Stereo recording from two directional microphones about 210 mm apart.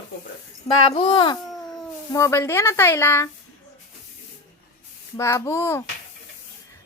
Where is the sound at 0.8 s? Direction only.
25° left (ahead or behind).